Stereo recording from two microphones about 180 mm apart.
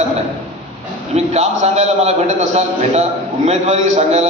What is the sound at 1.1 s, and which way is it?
A man's voice, 40° right (ahead or behind).